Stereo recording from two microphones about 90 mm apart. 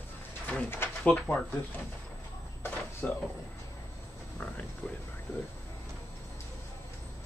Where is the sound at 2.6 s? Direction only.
20° left (ahead or behind).